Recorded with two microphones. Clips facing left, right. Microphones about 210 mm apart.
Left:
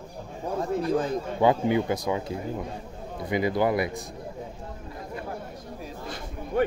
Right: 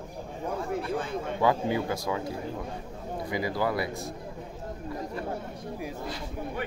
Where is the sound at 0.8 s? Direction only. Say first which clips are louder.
Left 6 dB; 40° left (ahead or behind).